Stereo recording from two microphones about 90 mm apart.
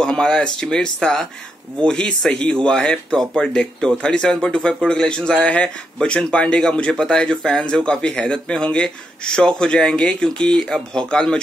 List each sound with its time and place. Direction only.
0.0 s speech: 5° left (ahead or behind)